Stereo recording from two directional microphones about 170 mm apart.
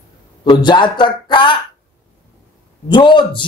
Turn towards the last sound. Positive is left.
turn(degrees=30)  # may be behind; listen again after turning